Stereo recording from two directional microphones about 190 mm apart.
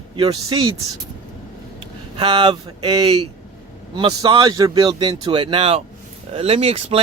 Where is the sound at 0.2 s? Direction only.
20° right (ahead or behind).